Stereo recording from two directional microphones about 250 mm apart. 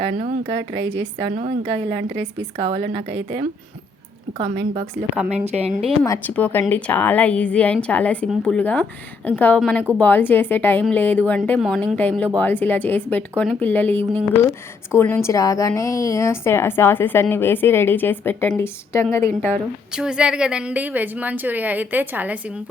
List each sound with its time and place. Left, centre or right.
0.0 s a woman's voice: right
5.3 s a woman's voice: right
6.0 s a woman's voice: centre
20.0 s a woman's voice: centre